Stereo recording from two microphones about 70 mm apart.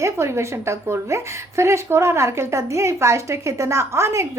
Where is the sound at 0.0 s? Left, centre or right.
Right.